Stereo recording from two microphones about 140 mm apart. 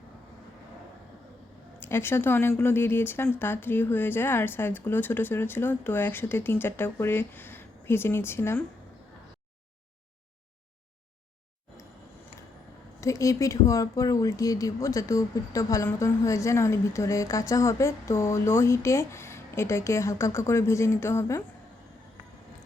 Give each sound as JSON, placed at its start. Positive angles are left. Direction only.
{"t": 1.8, "sound": "speech", "side_deg": 15}
{"t": 13.0, "sound": "speech", "side_deg": 25}